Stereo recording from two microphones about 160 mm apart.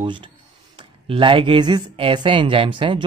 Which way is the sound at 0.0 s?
30° right (ahead or behind).